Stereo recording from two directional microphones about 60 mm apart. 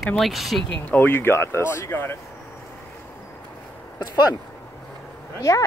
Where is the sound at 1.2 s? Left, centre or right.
Left.